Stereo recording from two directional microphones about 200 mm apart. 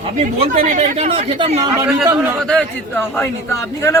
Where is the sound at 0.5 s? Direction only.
40° right (ahead or behind).